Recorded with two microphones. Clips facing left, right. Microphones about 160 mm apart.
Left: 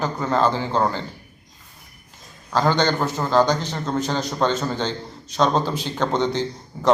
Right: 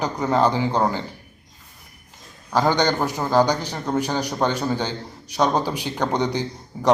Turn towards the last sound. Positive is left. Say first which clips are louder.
# left 1 dB
turn(degrees=-15)  # may be behind; listen again after turning